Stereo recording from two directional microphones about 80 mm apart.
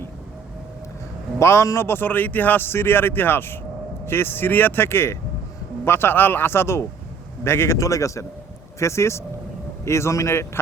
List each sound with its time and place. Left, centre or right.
1.4 s a man's voice: left